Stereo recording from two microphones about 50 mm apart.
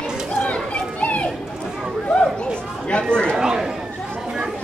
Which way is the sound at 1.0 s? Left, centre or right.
Left.